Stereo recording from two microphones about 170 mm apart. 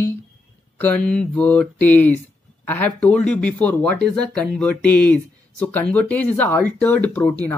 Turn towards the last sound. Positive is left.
turn(degrees=10)  # may be behind; listen again after turning